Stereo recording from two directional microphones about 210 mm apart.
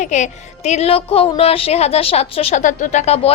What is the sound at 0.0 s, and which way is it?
A woman's voice, 35° left (ahead or behind).